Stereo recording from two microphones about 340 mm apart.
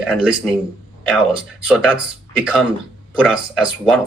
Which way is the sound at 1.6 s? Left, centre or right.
Centre.